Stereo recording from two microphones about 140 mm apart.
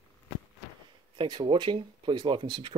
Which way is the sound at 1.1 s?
35° right (ahead or behind).